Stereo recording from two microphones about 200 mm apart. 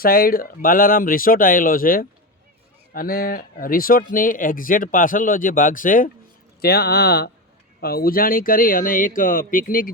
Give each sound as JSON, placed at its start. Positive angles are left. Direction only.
{"t": 0.0, "sound": "speech", "side_deg": 45}